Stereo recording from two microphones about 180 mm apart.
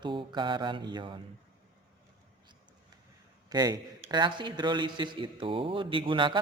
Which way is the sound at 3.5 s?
20° right (ahead or behind).